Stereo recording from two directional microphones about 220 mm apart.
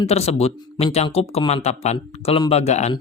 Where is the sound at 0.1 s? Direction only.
30° left (ahead or behind).